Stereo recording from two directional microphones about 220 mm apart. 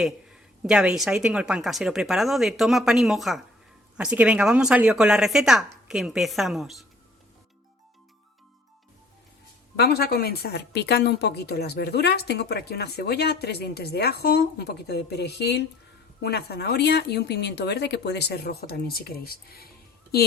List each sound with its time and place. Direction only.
0.0 s a woman's voice: 5° right (ahead or behind)
9.7 s a woman's voice: 45° left (ahead or behind)